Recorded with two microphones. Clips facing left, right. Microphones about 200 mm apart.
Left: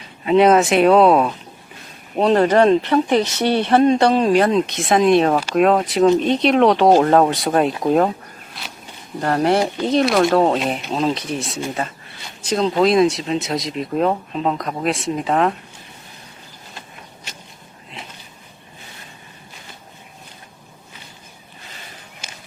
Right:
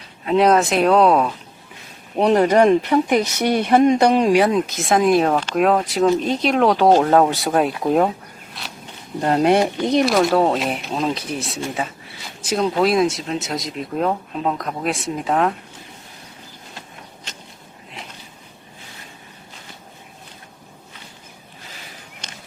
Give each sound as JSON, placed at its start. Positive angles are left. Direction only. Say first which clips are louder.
{"t": 0.3, "sound": "speech", "louder": "left 2 dB", "side_deg": 0}
{"t": 2.2, "sound": "speech", "louder": "even", "side_deg": -10}
{"t": 8.6, "sound": "a sound", "louder": "even", "side_deg": 0}
{"t": 9.2, "sound": "speech", "louder": "right 1 dB", "side_deg": -20}
{"t": 10.1, "sound": "speech", "louder": "left 1 dB", "side_deg": 0}
{"t": 22.2, "sound": "a sound", "louder": "even", "side_deg": 10}